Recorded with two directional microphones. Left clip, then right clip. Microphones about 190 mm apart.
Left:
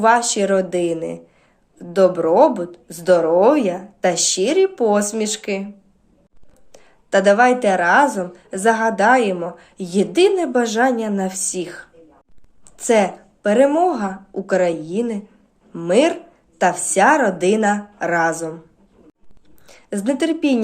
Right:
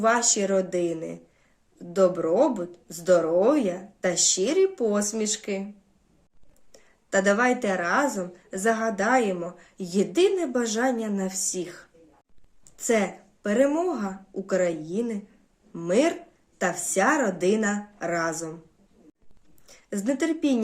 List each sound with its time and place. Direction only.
0.0 s a woman's voice: 20° right (ahead or behind)
6.7 s a woman's voice: 20° right (ahead or behind)
19.6 s a woman's voice: 20° right (ahead or behind)